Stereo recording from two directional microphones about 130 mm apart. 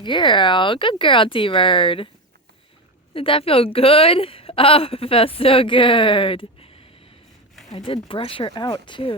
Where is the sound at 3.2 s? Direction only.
45° left (ahead or behind).